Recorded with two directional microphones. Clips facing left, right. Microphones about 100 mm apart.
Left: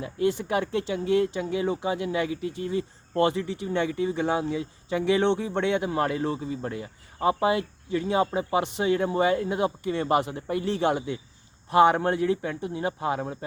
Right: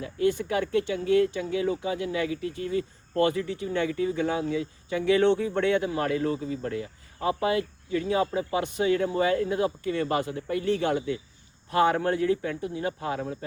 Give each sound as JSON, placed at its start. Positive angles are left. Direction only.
{"t": 0.0, "sound": "speech", "side_deg": 25}